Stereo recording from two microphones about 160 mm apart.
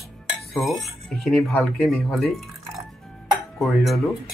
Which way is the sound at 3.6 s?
5° left (ahead or behind).